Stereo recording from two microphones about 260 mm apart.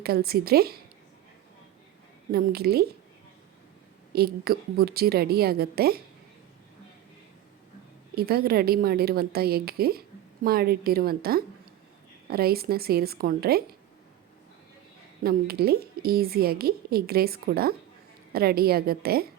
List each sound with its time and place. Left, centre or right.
0.0 s a woman's voice: right
2.3 s a woman's voice: right
4.1 s a woman's voice: right
8.1 s a woman's voice: right
15.2 s a woman's voice: right